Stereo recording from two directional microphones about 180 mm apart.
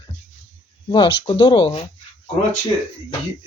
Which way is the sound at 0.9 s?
25° left (ahead or behind).